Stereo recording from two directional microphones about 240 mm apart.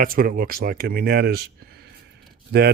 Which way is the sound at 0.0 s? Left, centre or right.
Right.